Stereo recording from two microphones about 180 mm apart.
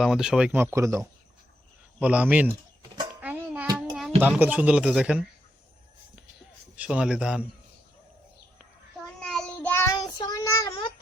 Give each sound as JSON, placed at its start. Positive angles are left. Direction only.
{"t": 0.0, "sound": "speech", "side_deg": -5}
{"t": 3.2, "sound": "a sound", "side_deg": -10}
{"t": 3.8, "sound": "child singing", "side_deg": 0}
{"t": 4.2, "sound": "speech", "side_deg": -10}
{"t": 6.7, "sound": "a man's voice", "side_deg": -5}
{"t": 9.2, "sound": "child singing", "side_deg": 5}